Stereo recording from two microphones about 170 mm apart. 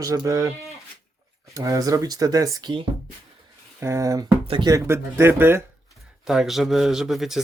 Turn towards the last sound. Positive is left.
turn(degrees=0)  # may be behind; listen again after turning